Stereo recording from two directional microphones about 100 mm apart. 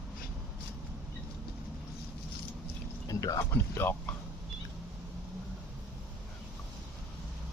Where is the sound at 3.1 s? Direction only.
35° left (ahead or behind).